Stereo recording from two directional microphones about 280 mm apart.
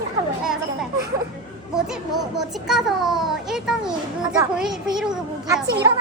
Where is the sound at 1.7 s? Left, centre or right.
Centre.